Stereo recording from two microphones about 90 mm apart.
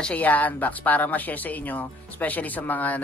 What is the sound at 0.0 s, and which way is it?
Speech, 15° left (ahead or behind).